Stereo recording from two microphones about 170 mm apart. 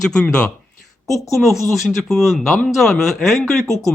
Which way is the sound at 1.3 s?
Centre (ahead or behind).